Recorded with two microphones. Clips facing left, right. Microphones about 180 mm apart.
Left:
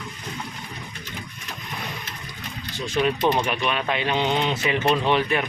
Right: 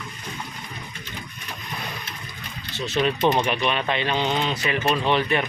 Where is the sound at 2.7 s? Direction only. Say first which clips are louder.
Even; 10° left (ahead or behind).